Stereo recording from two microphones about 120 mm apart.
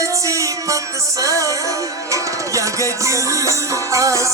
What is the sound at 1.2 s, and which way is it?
Music, 25° right (ahead or behind).